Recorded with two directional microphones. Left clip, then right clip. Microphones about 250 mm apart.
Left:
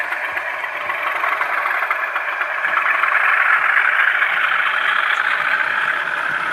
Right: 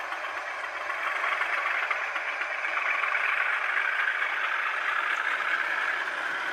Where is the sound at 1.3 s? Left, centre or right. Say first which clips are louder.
Left 9 dB; left.